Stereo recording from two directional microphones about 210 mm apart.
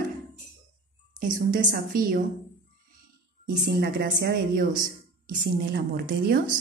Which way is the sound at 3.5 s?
50° right (ahead or behind).